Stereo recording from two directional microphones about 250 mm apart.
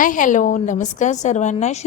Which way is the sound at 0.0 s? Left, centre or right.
Left.